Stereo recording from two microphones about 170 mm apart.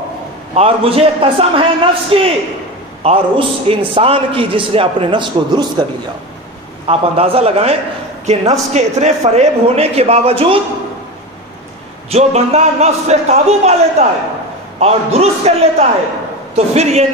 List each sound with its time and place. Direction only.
0.6 s a man's voice: 35° right (ahead or behind)
6.9 s a man's voice: 35° right (ahead or behind)
12.1 s a man's voice: 40° right (ahead or behind)